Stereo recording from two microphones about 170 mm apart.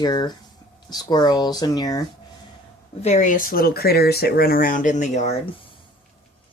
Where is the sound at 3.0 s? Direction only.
45° left (ahead or behind).